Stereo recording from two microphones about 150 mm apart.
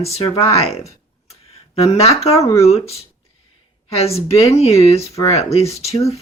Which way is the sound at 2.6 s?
45° left (ahead or behind).